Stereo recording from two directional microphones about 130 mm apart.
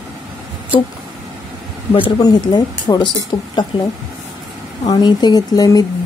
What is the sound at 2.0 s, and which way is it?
Speech, 35° left (ahead or behind).